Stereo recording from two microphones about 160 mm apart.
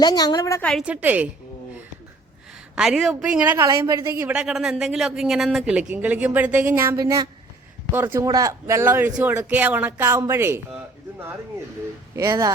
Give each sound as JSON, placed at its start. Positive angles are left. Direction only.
{"t": 0.0, "sound": "a woman's voice", "side_deg": 25}
{"t": 0.6, "sound": "a woman's voice", "side_deg": 5}
{"t": 0.9, "sound": "speech", "side_deg": -10}
{"t": 2.7, "sound": "a woman's voice", "side_deg": -5}
{"t": 3.7, "sound": "a woman's voice", "side_deg": -20}
{"t": 10.7, "sound": "a sound", "side_deg": -10}
{"t": 12.1, "sound": "speech", "side_deg": -20}